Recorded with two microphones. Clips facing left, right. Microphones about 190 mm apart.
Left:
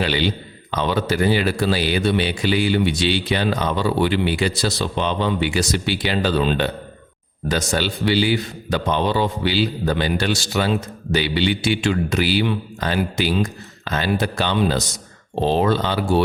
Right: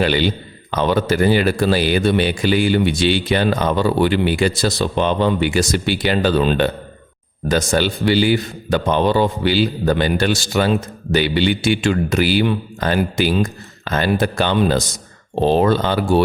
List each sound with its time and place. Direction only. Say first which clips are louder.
0.0 s a man's voice: right 4 dB; 50° right (ahead or behind)